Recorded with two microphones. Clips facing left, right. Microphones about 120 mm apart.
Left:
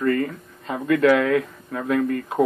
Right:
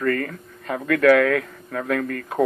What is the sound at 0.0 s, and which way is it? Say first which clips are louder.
Speech: left 2 dB; 15° left (ahead or behind).